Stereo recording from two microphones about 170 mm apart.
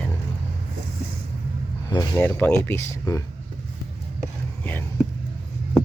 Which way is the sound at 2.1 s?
10° left (ahead or behind).